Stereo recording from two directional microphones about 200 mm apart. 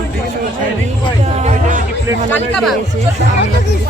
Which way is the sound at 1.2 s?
35° right (ahead or behind).